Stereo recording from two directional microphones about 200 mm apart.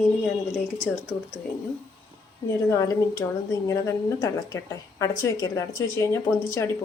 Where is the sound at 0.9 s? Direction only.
5° left (ahead or behind).